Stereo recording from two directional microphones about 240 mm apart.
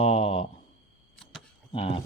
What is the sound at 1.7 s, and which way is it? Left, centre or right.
Speech, left.